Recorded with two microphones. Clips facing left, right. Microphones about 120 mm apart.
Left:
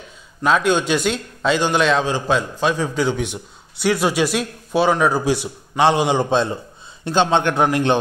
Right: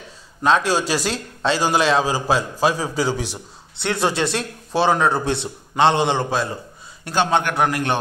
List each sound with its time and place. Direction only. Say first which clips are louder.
0.4 s a man's voice: left 1 dB; centre (ahead or behind)
3.8 s a man's voice: left 3 dB; 5° left (ahead or behind); by 8.0 s 20° left (ahead or behind)